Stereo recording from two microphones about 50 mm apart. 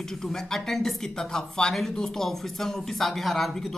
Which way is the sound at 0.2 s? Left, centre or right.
Centre.